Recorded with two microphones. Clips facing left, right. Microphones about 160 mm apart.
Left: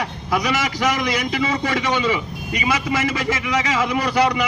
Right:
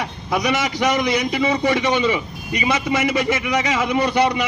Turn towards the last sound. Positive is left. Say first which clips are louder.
# right 1 dB
turn(degrees=-25)  # may be behind; listen again after turning